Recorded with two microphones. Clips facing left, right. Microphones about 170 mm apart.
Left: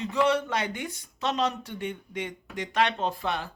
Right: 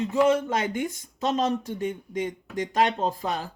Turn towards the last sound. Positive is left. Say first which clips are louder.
# right 2 dB
turn(degrees=-40)  # may be behind; listen again after turning